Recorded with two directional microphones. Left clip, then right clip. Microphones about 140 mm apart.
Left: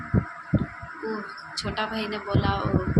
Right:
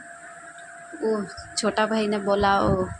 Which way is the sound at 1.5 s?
85° right.